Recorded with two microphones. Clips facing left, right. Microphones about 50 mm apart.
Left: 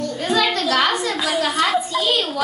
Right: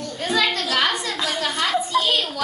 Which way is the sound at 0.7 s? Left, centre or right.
Centre.